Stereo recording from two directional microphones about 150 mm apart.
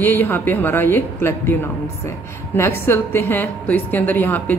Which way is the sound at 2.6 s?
15° left (ahead or behind).